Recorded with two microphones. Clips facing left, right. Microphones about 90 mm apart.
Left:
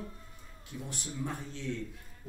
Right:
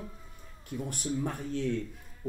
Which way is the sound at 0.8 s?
55° right (ahead or behind).